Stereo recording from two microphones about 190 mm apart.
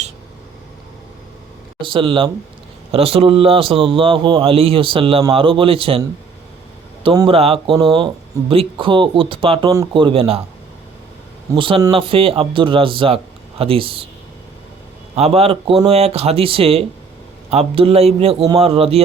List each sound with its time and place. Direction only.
1.8 s speech: 25° right (ahead or behind)
7.0 s speech: 25° right (ahead or behind)
11.5 s speech: 25° right (ahead or behind)
15.1 s speech: 35° right (ahead or behind)